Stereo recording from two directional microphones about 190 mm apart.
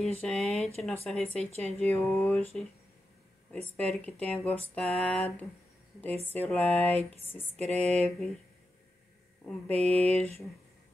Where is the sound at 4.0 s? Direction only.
5° left (ahead or behind).